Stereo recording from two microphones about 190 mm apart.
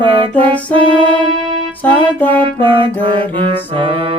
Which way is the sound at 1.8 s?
10° left (ahead or behind).